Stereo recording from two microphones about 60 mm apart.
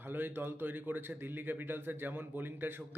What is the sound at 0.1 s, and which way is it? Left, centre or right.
A man's voice, right.